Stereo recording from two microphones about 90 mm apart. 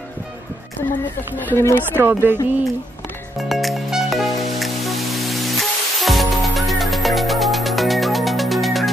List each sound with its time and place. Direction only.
1.5 s speech: 25° left (ahead or behind)
2.0 s a sound: 25° right (ahead or behind)
3.3 s music: centre (ahead or behind)